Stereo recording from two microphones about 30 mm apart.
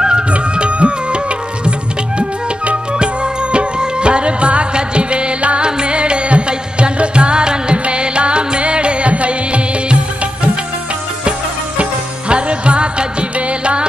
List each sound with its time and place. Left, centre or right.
0.3 s music: right
3.5 s music: right
11.7 s music: right